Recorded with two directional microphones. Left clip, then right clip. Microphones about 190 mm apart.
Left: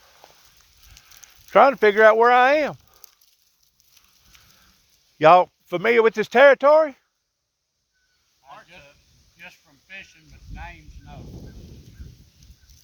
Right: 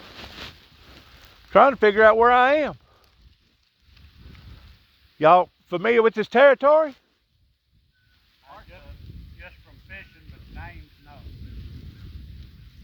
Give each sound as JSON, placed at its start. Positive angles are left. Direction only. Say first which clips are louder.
{"t": 1.5, "sound": "speech", "louder": "left 1 dB", "side_deg": -35}
{"t": 5.1, "sound": "speech", "louder": "left 2 dB", "side_deg": -30}
{"t": 9.4, "sound": "a sound", "louder": "left 2 dB", "side_deg": 55}